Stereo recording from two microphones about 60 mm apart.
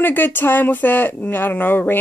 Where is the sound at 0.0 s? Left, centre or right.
Left.